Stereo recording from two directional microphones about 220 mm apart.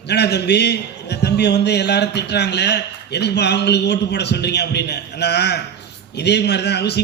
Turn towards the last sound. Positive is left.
turn(degrees=50)  # may be behind; listen again after turning